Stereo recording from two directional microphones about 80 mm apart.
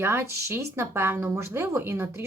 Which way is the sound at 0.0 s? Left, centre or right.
Right.